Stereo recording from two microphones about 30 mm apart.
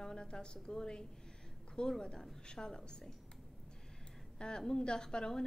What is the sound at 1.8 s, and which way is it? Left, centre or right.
A woman's voice, centre.